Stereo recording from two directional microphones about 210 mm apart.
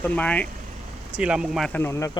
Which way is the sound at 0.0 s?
5° left (ahead or behind).